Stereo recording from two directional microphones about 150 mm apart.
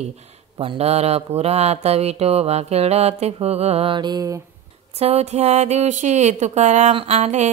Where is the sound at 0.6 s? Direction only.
40° right (ahead or behind).